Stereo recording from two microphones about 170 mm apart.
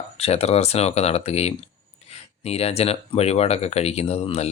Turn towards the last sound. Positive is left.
turn(degrees=40)  # may be behind; listen again after turning